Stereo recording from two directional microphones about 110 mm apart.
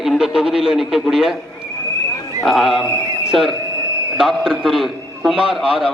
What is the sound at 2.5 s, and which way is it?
A man's voice, centre (ahead or behind).